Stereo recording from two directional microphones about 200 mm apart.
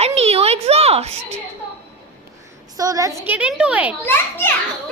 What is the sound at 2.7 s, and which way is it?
A woman's voice, 15° right (ahead or behind).